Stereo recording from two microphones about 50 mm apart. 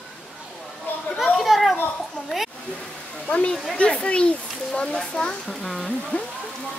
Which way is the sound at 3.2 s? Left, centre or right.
Left.